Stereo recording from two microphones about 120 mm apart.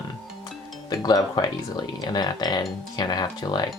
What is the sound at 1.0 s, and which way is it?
Speech, 35° left (ahead or behind).